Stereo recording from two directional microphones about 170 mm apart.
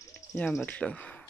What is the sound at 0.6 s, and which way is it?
Speech, 10° left (ahead or behind).